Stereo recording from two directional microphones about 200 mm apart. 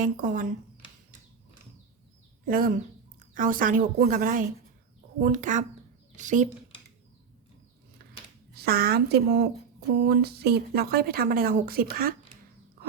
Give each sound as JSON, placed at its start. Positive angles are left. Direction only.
{"t": 0.0, "sound": "a woman's voice", "side_deg": -45}
{"t": 2.4, "sound": "a woman's voice", "side_deg": -45}
{"t": 8.5, "sound": "a woman's voice", "side_deg": -50}